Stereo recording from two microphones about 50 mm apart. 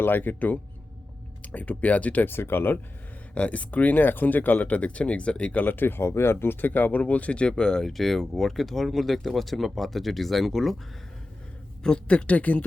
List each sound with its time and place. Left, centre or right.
0.0 s speech: left
2.2 s speech: left
3.3 s speech: left
5.6 s speech: left
6.0 s speech: left
6.4 s speech: left; by 10.8 s centre
12.0 s speech: left